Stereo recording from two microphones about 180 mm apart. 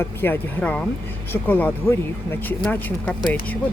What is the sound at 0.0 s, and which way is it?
Speech, 10° left (ahead or behind).